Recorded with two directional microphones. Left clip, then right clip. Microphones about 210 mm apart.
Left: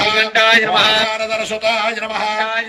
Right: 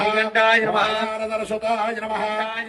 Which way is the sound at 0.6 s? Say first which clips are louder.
Left 7 dB; 40° right (ahead or behind).